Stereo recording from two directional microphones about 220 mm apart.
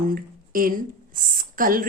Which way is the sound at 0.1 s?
40° right (ahead or behind).